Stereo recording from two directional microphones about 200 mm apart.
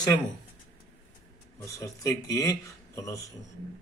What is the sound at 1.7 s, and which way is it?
A man's voice, 15° left (ahead or behind).